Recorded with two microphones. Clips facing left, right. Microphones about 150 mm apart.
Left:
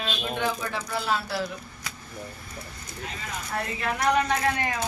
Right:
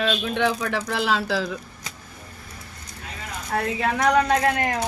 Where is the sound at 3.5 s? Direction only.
75° right (ahead or behind).